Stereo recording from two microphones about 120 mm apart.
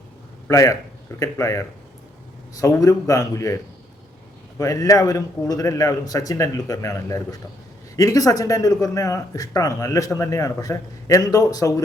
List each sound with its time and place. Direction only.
0.4 s speech: 25° left (ahead or behind)